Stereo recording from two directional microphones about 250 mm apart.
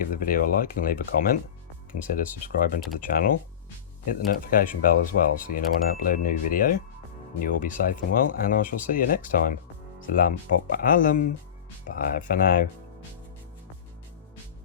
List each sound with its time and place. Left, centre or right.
0.0 s speech: left